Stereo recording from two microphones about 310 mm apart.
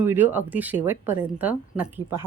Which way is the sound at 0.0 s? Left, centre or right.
Centre.